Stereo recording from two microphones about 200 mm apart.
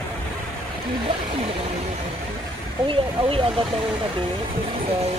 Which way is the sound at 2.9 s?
25° right (ahead or behind).